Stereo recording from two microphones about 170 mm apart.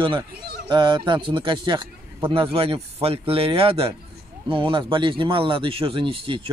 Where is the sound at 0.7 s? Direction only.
25° right (ahead or behind).